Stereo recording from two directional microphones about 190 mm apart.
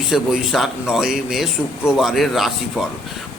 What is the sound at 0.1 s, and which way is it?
A man's voice, centre (ahead or behind).